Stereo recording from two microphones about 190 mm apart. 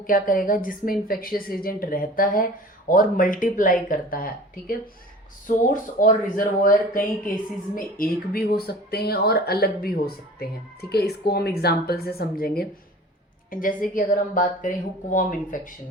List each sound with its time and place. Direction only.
0.1 s a woman's voice: 45° left (ahead or behind)